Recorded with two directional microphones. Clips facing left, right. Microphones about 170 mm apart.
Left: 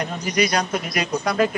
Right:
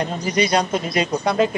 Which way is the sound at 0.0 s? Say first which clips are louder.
Right 2 dB; 30° right (ahead or behind).